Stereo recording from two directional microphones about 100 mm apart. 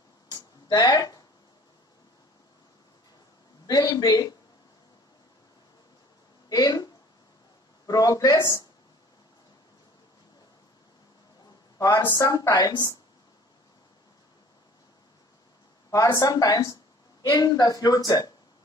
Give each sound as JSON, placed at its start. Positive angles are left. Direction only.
{"t": 0.3, "sound": "a sound", "side_deg": 40}
{"t": 3.6, "sound": "speech", "side_deg": 40}
{"t": 6.5, "sound": "speech", "side_deg": 40}
{"t": 12.0, "sound": "speech", "side_deg": 30}
{"t": 15.9, "sound": "speech", "side_deg": 35}